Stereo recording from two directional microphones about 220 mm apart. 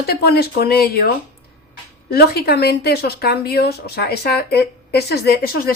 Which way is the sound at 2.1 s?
45° left (ahead or behind).